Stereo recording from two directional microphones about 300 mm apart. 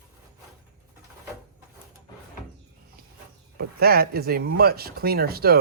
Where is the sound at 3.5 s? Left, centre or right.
Right.